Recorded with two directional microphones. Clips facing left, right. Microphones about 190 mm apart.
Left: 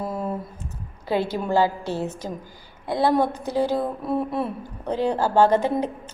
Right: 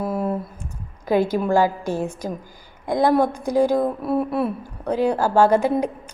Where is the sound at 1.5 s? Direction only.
15° right (ahead or behind).